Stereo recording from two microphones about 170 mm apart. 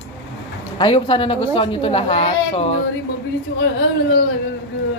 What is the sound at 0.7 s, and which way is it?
A woman's voice, 30° left (ahead or behind).